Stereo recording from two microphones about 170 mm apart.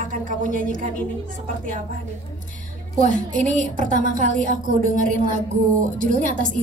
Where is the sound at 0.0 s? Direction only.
50° right (ahead or behind).